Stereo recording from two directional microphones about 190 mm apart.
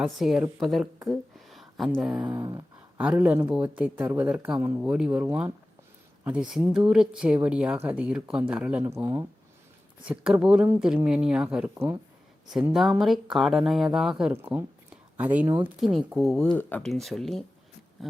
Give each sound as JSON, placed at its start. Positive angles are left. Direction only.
{"t": 0.0, "sound": "speech", "side_deg": -5}
{"t": 1.0, "sound": "a sound", "side_deg": 0}
{"t": 1.9, "sound": "speech", "side_deg": -5}
{"t": 2.2, "sound": "speech", "side_deg": -20}
{"t": 3.0, "sound": "speech", "side_deg": -5}